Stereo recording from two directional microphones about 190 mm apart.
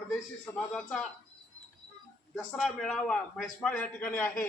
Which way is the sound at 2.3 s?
Centre (ahead or behind).